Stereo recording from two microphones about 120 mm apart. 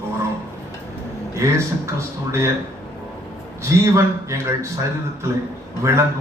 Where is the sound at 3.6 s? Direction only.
25° right (ahead or behind).